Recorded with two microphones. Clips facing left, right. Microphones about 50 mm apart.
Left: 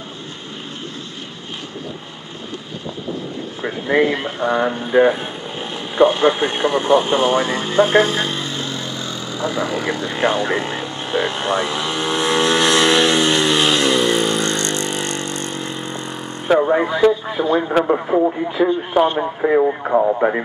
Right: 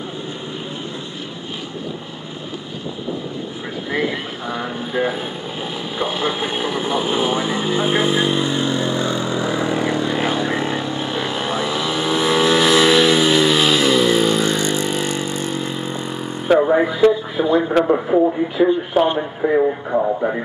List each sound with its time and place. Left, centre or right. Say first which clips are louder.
3.6 s speech: left 6 dB; left
4.1 s speech: left 6 dB; centre; by 9.4 s right
9.4 s vehicle: left 3 dB; right
10.1 s speech: left 2 dB; centre
10.8 s vehicle: left 1 dB; centre
16.8 s speech: even; centre
17.6 s speech: right 2 dB; centre
18.6 s speech: even; centre
19.1 s speech: left 1 dB; centre
20.2 s speech: left 3 dB; left